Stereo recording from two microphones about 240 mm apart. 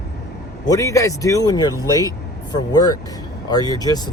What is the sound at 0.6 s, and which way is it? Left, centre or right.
Speech, centre.